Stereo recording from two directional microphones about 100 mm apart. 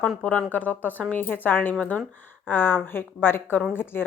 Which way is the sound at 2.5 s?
20° left (ahead or behind).